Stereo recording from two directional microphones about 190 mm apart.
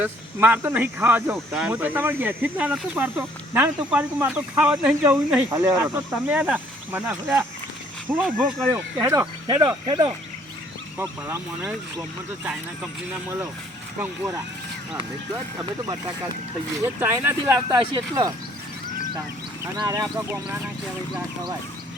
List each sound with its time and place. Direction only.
0.0 s speech: 10° right (ahead or behind)
10.9 s speech: 10° right (ahead or behind)
14.0 s speech: 15° right (ahead or behind)
15.5 s speech: 20° right (ahead or behind)
19.7 s speech: 20° right (ahead or behind)